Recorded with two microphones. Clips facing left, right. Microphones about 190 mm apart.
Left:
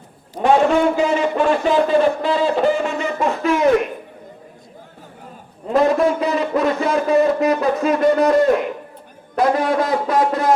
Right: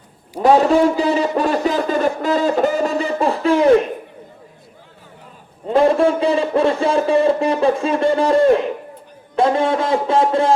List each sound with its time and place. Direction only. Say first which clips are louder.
0.3 s a man's voice: right 2 dB; 35° right (ahead or behind)
5.7 s a man's voice: right 2 dB; 30° right (ahead or behind)